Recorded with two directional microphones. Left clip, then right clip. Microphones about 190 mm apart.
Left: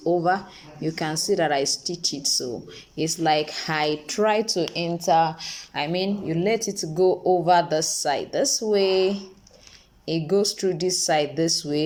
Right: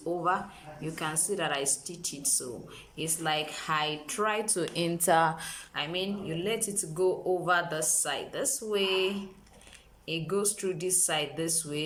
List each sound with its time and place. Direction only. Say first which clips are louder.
0.2 s speech: left 6 dB; 25° left (ahead or behind)
4.5 s a woman's voice: left 5 dB; 5° left (ahead or behind)
5.5 s speech: left 7 dB; 25° left (ahead or behind)